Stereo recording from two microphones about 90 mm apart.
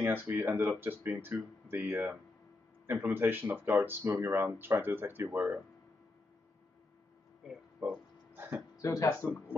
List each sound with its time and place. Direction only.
0.0 s speech: 25° right (ahead or behind)
7.8 s speech: 15° right (ahead or behind)
8.8 s speech: 35° left (ahead or behind)